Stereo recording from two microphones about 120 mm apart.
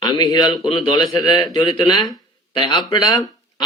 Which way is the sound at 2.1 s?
40° left (ahead or behind).